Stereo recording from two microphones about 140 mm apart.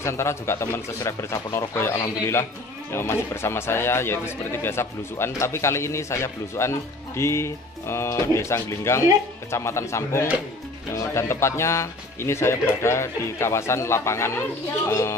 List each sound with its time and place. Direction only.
0.0 s speech: 20° left (ahead or behind)